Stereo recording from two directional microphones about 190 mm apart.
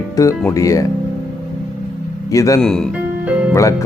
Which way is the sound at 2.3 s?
15° left (ahead or behind).